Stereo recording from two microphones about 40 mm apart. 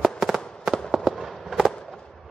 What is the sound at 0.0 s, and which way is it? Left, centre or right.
Fireworks, centre.